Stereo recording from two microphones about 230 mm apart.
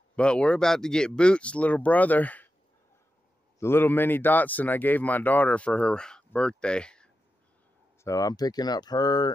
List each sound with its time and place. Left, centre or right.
0.1 s speech: centre
3.5 s speech: centre
8.0 s speech: centre